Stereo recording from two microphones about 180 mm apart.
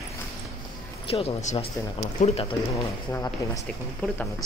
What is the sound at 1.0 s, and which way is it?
Speech, 35° left (ahead or behind).